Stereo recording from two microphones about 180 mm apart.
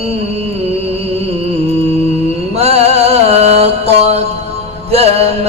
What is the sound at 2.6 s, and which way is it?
Mantra, 35° right (ahead or behind).